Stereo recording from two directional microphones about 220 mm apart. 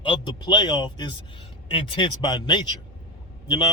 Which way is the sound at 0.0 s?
20° left (ahead or behind).